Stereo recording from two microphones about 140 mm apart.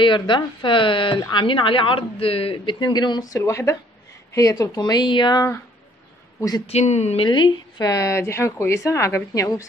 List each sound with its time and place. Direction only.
0.0 s a woman's voice: 35° left (ahead or behind)
6.6 s speech: 50° left (ahead or behind)
7.2 s speech: 35° left (ahead or behind)
7.9 s a woman's voice: 20° left (ahead or behind)